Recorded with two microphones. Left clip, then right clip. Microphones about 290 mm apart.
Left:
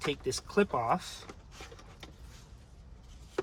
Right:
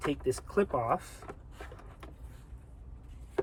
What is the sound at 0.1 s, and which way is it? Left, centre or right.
Speech, centre.